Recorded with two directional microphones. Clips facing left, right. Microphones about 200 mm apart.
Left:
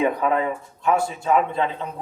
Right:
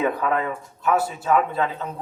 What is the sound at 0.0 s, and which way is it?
A man's voice, 20° left (ahead or behind).